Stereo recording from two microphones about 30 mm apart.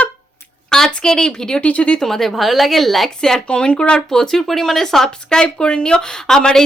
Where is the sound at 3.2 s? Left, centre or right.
Centre.